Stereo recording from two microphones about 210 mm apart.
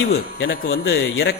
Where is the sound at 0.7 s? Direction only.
65° left (ahead or behind).